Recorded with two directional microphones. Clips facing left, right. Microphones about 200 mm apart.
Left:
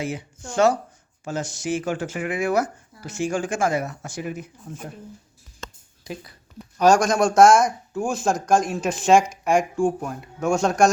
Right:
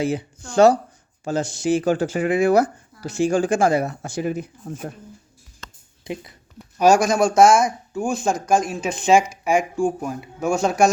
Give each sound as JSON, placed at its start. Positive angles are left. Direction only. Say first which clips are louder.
{"t": 0.0, "sound": "speech", "louder": "right 6 dB", "side_deg": -35}
{"t": 6.7, "sound": "speech", "louder": "right 1 dB", "side_deg": -10}